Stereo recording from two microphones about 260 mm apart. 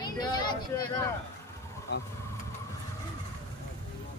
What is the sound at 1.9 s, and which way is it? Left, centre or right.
Speech, left.